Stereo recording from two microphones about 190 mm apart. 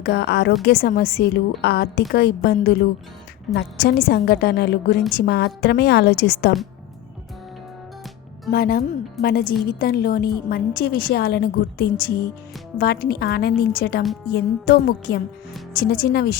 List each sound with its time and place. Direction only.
0.0 s a woman's voice: 60° left (ahead or behind)
8.4 s a woman's voice: 50° left (ahead or behind)